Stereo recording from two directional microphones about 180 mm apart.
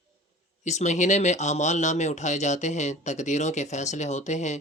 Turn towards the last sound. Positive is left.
turn(degrees=40)  # may be behind; listen again after turning